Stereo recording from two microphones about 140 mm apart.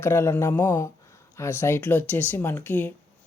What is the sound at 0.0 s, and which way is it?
Speech, 20° left (ahead or behind).